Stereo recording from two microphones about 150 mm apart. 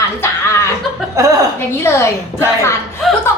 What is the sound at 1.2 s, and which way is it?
Speech, 20° right (ahead or behind).